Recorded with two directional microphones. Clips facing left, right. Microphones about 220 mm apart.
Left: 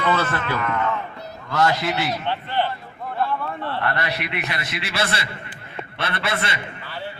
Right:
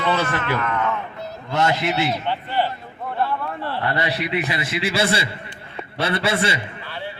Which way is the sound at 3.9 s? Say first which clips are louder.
Right 4 dB; 30° right (ahead or behind).